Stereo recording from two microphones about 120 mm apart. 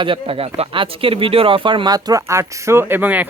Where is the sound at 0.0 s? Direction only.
50° right (ahead or behind).